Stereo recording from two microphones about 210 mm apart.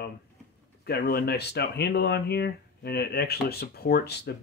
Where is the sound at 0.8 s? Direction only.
50° left (ahead or behind).